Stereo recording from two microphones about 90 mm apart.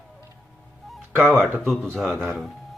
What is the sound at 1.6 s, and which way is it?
Speech, 5° left (ahead or behind).